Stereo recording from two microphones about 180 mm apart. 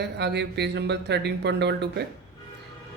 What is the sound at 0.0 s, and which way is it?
A man's voice, 70° right (ahead or behind).